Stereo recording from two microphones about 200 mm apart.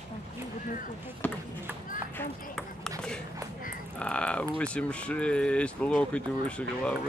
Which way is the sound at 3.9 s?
5° left (ahead or behind).